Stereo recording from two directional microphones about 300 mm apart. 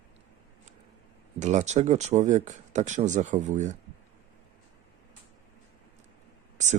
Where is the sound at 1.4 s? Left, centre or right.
Right.